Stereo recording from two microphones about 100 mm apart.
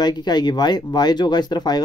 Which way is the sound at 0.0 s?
45° left (ahead or behind).